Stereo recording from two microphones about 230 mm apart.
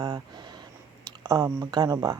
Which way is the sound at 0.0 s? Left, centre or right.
Centre.